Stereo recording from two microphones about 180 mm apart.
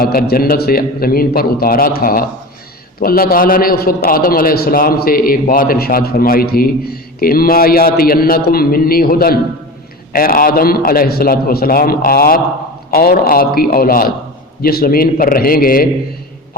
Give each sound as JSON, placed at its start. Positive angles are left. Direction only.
{"t": 0.0, "sound": "a man's voice", "side_deg": 55}